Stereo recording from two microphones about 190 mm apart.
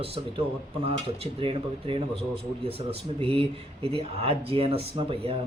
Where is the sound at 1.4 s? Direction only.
30° right (ahead or behind).